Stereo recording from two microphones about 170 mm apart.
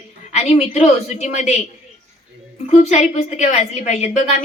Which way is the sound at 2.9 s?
40° left (ahead or behind).